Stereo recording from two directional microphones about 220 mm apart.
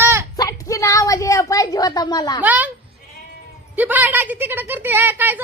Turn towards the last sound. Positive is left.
turn(degrees=-10)  # may be behind; listen again after turning